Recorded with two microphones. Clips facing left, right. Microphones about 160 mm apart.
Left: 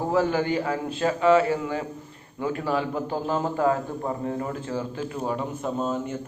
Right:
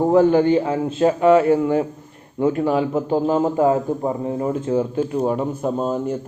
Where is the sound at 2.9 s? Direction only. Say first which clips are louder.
Right 8 dB; 15° right (ahead or behind).